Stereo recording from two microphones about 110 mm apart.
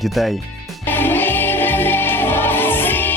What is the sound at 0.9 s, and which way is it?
Music, 20° left (ahead or behind).